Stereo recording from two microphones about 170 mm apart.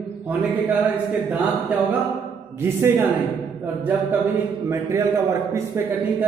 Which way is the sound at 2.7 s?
15° right (ahead or behind).